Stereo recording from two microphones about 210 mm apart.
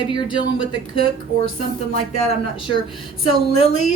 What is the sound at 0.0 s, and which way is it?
Speech, 20° left (ahead or behind).